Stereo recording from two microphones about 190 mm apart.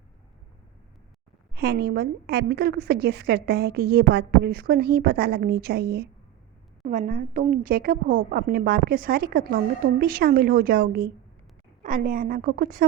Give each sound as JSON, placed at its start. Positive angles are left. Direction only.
{"t": 1.5, "sound": "a woman's voice", "side_deg": -55}
{"t": 6.8, "sound": "a woman's voice", "side_deg": -40}